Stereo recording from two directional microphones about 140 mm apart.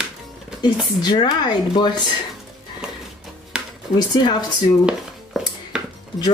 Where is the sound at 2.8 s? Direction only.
5° right (ahead or behind).